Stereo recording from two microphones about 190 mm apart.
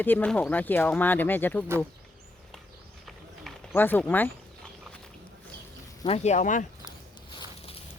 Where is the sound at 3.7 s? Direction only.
10° left (ahead or behind).